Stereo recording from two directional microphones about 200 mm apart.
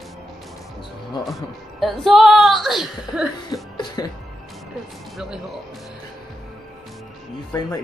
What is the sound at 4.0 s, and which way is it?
Speech, 20° left (ahead or behind).